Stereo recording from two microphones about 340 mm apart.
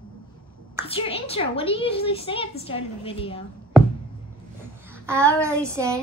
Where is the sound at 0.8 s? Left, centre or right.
Centre.